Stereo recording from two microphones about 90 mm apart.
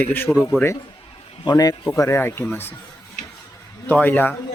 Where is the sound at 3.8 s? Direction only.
20° left (ahead or behind).